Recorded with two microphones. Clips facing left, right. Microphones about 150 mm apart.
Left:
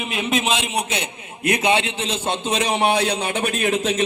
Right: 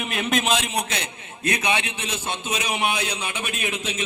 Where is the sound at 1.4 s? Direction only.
20° left (ahead or behind).